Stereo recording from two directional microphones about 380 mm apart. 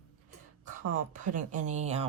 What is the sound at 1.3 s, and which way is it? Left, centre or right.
Speech, centre.